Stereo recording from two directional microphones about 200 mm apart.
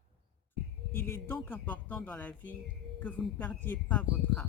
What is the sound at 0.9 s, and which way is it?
Speech, 10° left (ahead or behind).